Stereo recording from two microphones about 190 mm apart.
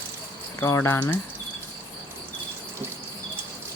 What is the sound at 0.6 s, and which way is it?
Speech, 15° left (ahead or behind).